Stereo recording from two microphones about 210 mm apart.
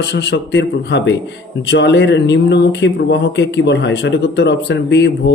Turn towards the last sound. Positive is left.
turn(degrees=55)  # may be behind; listen again after turning